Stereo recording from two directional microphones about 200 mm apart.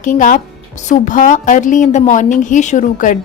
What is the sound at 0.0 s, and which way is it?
A woman's voice, 40° left (ahead or behind).